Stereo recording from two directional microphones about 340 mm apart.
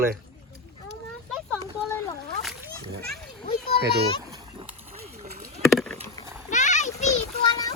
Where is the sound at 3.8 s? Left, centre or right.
Right.